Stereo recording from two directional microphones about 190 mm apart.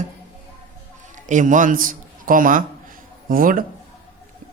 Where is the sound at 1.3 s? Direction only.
40° right (ahead or behind).